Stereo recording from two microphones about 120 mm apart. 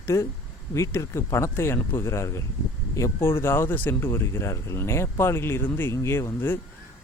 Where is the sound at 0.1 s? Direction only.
25° left (ahead or behind).